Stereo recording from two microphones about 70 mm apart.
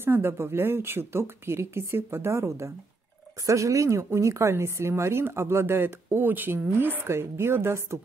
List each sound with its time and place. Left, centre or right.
0.0 s speech: right